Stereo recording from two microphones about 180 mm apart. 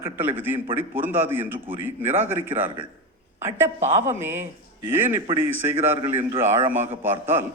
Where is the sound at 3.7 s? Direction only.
40° right (ahead or behind).